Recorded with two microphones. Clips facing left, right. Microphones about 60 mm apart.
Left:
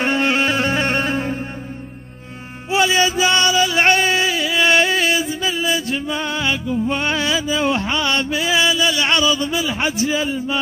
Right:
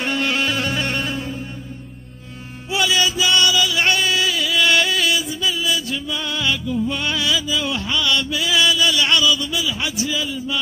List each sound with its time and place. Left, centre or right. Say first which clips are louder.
0.0 s music: left 4 dB; left
2.7 s chant: left 3 dB; left